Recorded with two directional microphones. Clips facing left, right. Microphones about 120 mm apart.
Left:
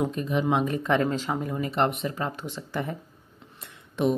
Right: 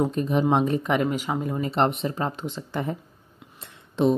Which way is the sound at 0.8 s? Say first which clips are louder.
Even; 15° right (ahead or behind).